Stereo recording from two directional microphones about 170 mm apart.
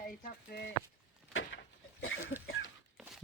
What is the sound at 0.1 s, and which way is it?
Speech, 55° left (ahead or behind).